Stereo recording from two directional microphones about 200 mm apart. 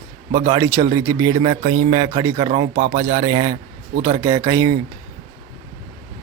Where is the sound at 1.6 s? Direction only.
30° right (ahead or behind).